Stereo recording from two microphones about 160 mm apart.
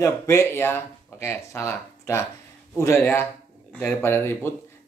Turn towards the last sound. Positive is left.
turn(degrees=15)  # may be behind; listen again after turning